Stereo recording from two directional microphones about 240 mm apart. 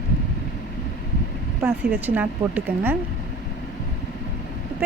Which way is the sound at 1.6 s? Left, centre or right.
Centre.